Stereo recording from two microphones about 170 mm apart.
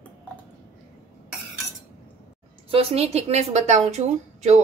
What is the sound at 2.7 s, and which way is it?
A woman's voice, 35° right (ahead or behind).